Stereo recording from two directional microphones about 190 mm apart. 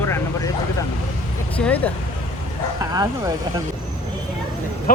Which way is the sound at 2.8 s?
15° right (ahead or behind).